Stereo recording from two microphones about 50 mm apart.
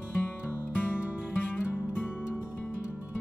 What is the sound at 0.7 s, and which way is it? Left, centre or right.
Music, left.